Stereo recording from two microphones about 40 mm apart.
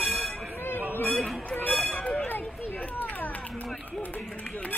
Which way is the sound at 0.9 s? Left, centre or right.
Left.